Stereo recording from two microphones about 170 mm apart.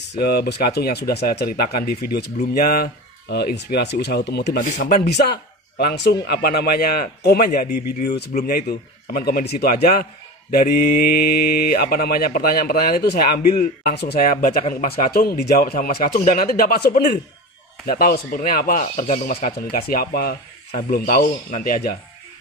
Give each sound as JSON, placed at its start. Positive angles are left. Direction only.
{"t": 0.1, "sound": "speech", "side_deg": 65}
{"t": 4.6, "sound": "speech", "side_deg": 50}
{"t": 5.2, "sound": "a man's voice", "side_deg": 65}
{"t": 6.2, "sound": "speech", "side_deg": 65}